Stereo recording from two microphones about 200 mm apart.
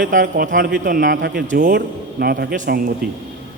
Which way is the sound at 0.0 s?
45° right (ahead or behind).